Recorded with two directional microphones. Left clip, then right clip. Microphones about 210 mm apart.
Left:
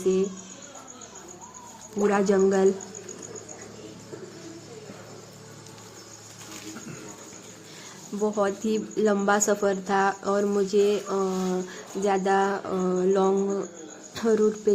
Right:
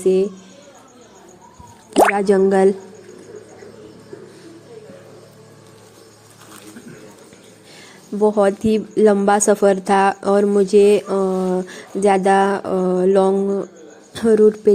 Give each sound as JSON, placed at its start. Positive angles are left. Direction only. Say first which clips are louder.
{"t": 0.0, "sound": "a woman's voice", "louder": "right 8 dB", "side_deg": -25}
{"t": 2.1, "sound": "a woman's voice", "louder": "right 7 dB", "side_deg": -25}
{"t": 8.2, "sound": "a woman's voice", "louder": "right 10 dB", "side_deg": -25}